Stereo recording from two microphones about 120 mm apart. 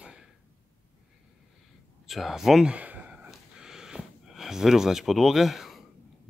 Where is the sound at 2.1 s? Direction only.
Centre (ahead or behind).